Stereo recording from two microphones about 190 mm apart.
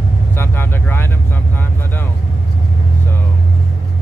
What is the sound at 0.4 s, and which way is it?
Vehicle, 10° left (ahead or behind).